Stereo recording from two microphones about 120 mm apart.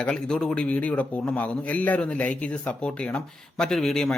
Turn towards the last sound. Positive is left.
turn(degrees=5)  # may be behind; listen again after turning